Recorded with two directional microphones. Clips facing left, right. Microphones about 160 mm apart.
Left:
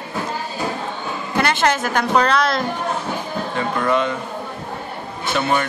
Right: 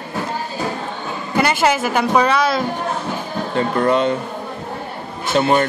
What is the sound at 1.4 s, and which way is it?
Speech, 10° right (ahead or behind).